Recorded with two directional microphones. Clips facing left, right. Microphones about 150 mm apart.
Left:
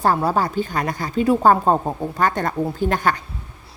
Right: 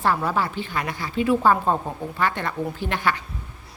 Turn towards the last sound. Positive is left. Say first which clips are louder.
# left 5 dB
turn(degrees=40)  # may be behind; listen again after turning